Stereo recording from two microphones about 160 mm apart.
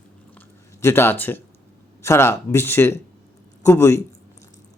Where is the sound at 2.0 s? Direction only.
15° left (ahead or behind).